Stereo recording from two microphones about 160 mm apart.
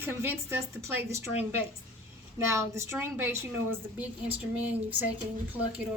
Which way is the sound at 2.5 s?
15° right (ahead or behind).